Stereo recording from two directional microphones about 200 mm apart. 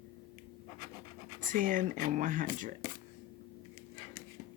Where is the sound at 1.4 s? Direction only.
40° right (ahead or behind).